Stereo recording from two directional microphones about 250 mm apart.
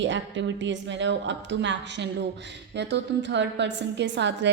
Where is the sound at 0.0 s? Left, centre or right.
Right.